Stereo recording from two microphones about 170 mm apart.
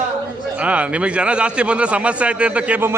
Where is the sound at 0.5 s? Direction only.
10° right (ahead or behind).